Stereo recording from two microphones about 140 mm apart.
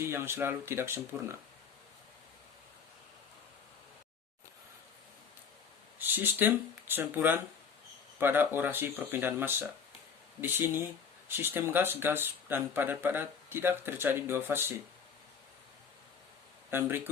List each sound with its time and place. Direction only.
0.0 s speech: 20° right (ahead or behind)
6.0 s speech: 15° right (ahead or behind)
16.7 s speech: 15° right (ahead or behind)